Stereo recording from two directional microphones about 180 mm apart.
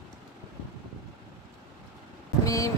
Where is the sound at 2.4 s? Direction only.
20° left (ahead or behind).